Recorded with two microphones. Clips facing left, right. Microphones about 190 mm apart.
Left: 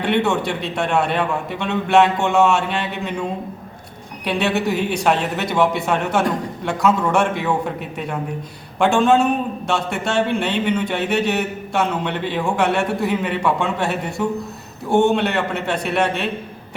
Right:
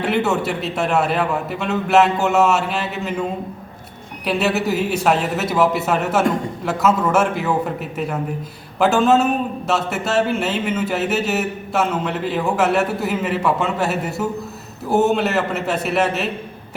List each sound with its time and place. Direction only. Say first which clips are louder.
0.0 s speech: even; 5° right (ahead or behind)
4.3 s speech: right 1 dB; 5° right (ahead or behind)